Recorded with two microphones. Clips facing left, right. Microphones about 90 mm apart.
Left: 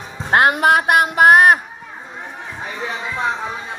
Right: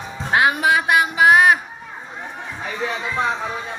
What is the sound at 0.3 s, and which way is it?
Music, 55° left (ahead or behind).